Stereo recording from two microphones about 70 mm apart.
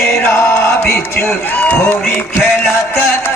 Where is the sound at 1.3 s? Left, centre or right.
Left.